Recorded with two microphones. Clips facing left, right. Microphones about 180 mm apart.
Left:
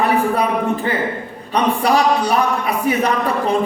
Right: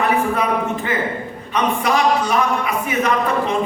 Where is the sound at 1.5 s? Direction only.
35° left (ahead or behind).